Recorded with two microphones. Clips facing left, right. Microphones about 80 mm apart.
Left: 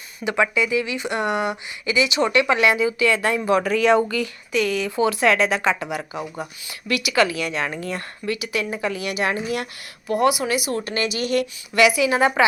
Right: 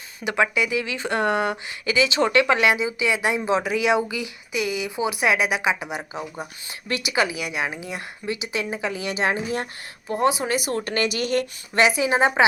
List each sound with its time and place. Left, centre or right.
0.3 s speech: right; by 8.0 s centre
8.3 s speech: right